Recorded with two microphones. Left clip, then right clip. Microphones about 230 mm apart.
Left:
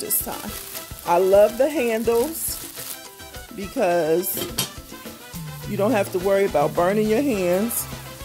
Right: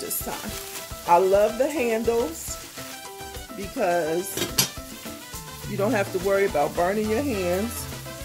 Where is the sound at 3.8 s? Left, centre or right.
Left.